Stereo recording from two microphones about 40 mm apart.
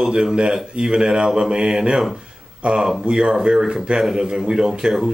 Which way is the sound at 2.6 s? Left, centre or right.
Right.